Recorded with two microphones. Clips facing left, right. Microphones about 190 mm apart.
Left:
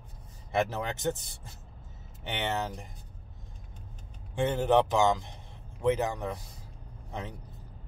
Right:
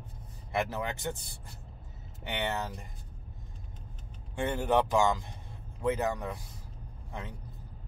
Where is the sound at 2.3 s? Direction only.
20° left (ahead or behind).